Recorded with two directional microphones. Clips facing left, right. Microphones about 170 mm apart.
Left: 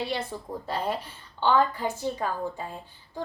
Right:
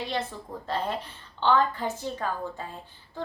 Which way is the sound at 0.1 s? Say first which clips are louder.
Even; 10° left (ahead or behind).